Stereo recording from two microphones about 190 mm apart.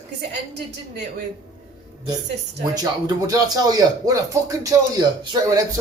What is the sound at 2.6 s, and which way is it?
Speech, 20° right (ahead or behind).